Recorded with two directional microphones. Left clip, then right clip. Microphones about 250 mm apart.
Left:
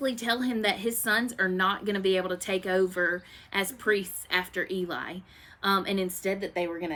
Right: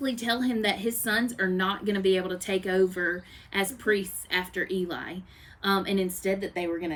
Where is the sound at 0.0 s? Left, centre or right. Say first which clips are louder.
Even; centre.